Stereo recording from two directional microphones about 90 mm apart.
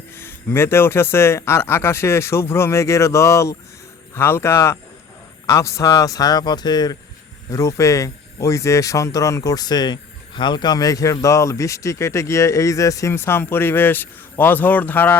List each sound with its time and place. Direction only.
0.2 s speech: 25° left (ahead or behind); by 6.9 s 50° left (ahead or behind)
7.5 s speech: 35° left (ahead or behind); by 15.1 s 20° left (ahead or behind)